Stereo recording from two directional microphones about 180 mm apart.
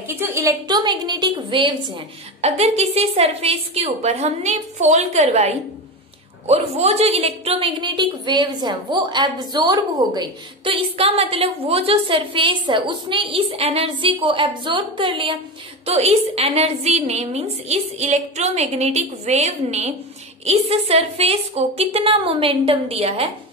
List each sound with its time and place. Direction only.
0.1 s a woman's voice: 15° right (ahead or behind); by 23.2 s 35° right (ahead or behind)